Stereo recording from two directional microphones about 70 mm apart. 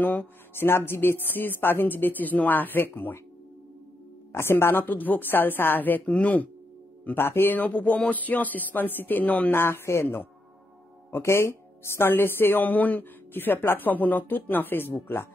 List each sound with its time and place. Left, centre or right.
0.0 s speech: left
4.3 s speech: left
7.1 s speech: left